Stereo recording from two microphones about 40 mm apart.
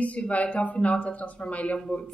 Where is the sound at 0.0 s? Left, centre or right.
Left.